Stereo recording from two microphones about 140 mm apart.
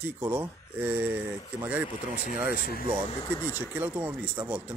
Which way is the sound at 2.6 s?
90° left.